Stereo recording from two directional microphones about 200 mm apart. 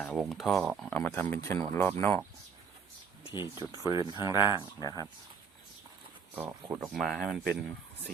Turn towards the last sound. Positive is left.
turn(degrees=0)  # may be behind; listen again after turning